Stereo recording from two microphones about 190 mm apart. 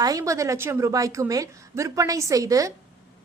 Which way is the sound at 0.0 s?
15° right (ahead or behind).